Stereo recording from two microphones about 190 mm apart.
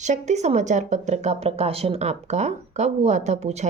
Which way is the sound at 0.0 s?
40° right (ahead or behind).